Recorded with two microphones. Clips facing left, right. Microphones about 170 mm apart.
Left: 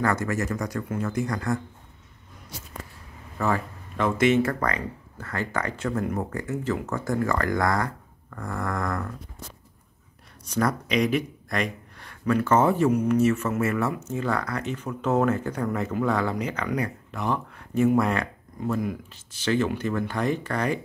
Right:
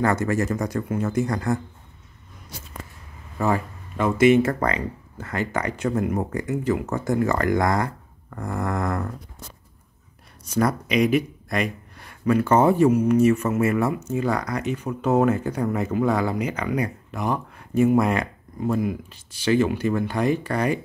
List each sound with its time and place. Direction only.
0.0 s speech: 25° right (ahead or behind)
3.3 s speech: 15° right (ahead or behind)
4.4 s speech: 25° right (ahead or behind)
10.5 s speech: 10° right (ahead or behind)